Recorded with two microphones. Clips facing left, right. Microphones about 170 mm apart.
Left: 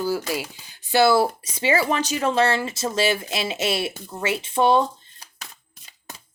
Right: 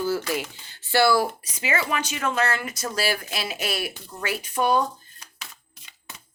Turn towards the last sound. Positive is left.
turn(degrees=40)  # may be behind; listen again after turning